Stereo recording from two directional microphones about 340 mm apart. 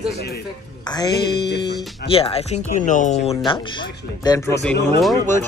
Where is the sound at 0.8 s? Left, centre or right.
Centre.